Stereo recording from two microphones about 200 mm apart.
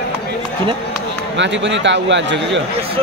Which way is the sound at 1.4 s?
65° right (ahead or behind).